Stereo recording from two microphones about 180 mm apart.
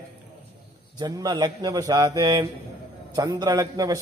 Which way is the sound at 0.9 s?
20° right (ahead or behind).